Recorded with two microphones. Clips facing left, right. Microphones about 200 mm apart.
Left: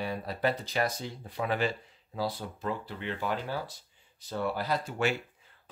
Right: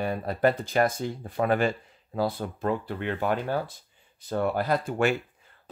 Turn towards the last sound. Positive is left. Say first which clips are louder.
# right 5 dB
turn(degrees=-55)  # may be behind; listen again after turning